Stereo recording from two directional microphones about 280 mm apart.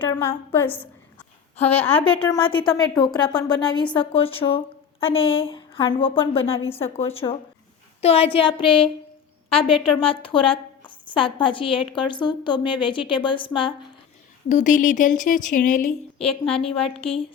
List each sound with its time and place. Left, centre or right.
0.0 s a woman's voice: centre